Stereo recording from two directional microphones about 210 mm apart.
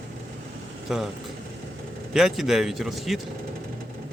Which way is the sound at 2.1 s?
Centre (ahead or behind).